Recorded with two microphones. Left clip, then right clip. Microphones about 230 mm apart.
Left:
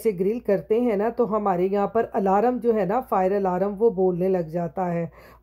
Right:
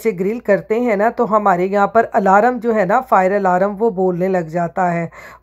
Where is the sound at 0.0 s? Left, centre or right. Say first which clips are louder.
Right 5 dB; centre.